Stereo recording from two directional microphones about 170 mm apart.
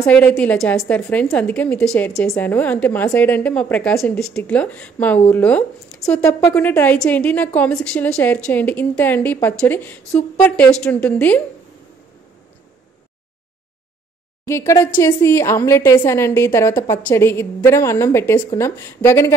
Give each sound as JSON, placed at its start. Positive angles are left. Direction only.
{"t": 0.0, "sound": "a woman's voice", "side_deg": 10}
{"t": 14.4, "sound": "a woman's voice", "side_deg": 15}